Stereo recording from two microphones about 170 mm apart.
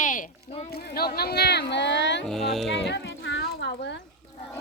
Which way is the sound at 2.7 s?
90° left.